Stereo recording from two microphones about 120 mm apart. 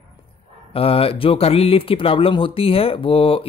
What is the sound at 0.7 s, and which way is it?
Speech, 50° left (ahead or behind).